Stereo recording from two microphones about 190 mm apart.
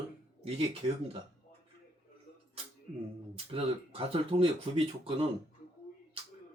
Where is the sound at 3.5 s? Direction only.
30° right (ahead or behind).